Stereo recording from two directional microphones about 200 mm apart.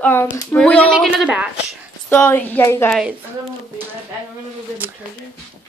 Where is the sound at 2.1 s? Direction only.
10° left (ahead or behind).